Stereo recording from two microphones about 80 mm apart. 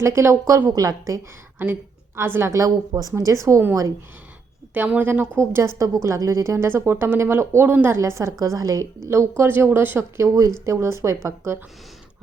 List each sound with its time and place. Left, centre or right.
0.0 s speech: right
0.7 s a woman's voice: right
1.5 s a woman's voice: right
2.5 s a woman's voice: right
4.7 s speech: right
5.4 s speech: right
7.9 s a woman's voice: right
9.4 s speech: right